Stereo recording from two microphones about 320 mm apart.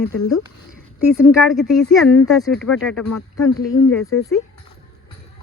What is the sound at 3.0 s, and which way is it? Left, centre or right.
Speech, left.